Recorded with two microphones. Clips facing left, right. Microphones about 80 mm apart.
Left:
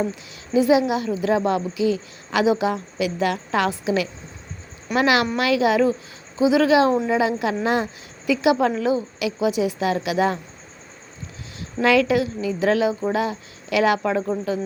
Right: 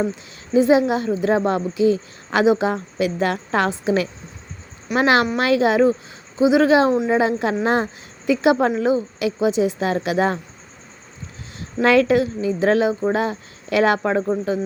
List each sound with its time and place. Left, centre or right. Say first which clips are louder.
0.5 s a woman's voice: right 2 dB; right
11.8 s a woman's voice: right 2 dB; right